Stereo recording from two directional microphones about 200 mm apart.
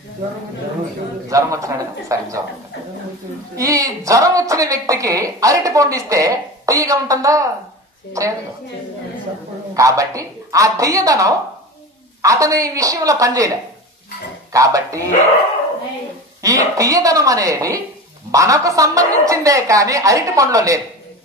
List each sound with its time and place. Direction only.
1.3 s a woman's voice: 15° right (ahead or behind)
3.5 s a woman's voice: 15° right (ahead or behind)
9.8 s a woman's voice: 15° right (ahead or behind)
14.5 s a woman's voice: 15° right (ahead or behind)
16.4 s a woman's voice: 15° right (ahead or behind)